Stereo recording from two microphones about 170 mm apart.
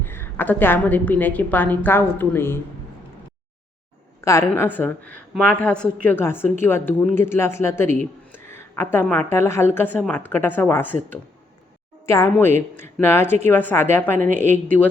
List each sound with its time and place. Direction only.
0.0 s a woman's voice: 10° left (ahead or behind)
4.2 s a woman's voice: 15° left (ahead or behind)
12.0 s a woman's voice: 15° left (ahead or behind)